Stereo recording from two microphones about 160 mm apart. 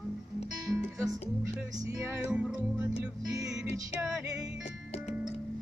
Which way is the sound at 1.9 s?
5° right (ahead or behind).